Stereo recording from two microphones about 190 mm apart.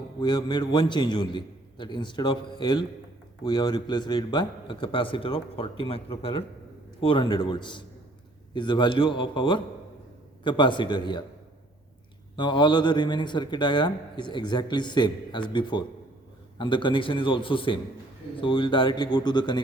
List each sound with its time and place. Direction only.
0.2 s a man's voice: 25° left (ahead or behind)
12.4 s a man's voice: 25° left (ahead or behind)